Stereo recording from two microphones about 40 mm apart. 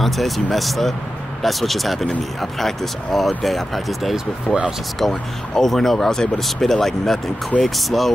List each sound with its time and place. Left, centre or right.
0.0 s speech: centre
4.5 s speech: left
4.9 s speech: centre